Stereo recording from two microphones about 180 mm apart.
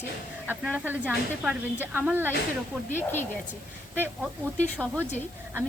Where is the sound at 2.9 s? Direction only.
10° left (ahead or behind).